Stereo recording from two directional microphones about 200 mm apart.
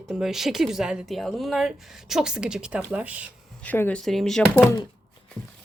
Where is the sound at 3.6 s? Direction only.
10° left (ahead or behind).